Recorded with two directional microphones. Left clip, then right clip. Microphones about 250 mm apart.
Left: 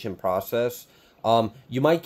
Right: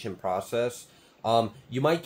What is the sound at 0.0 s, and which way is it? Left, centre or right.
Speech, left.